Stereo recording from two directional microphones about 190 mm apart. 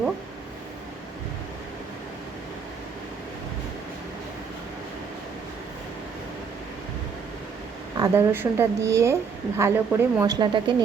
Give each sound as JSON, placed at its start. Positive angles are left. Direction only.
{"t": 7.9, "sound": "a woman's voice", "side_deg": -20}